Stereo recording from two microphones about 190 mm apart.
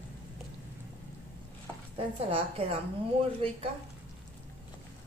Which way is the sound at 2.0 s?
30° right (ahead or behind).